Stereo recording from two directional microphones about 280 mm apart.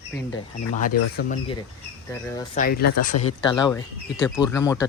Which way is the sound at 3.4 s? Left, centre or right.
Centre.